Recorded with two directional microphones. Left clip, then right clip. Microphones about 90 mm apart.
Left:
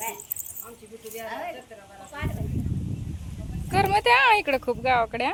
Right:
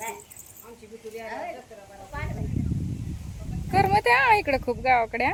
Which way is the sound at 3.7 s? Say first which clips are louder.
Even; 25° right (ahead or behind).